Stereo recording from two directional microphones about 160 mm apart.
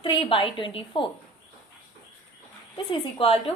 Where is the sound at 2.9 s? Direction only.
35° left (ahead or behind).